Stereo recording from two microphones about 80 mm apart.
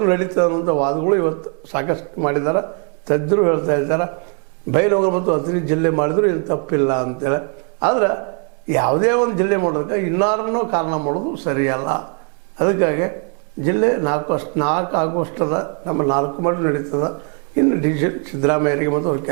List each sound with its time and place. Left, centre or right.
0.0 s a man's voice: right